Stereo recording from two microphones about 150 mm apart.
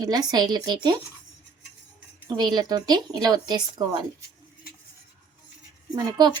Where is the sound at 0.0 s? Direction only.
25° right (ahead or behind).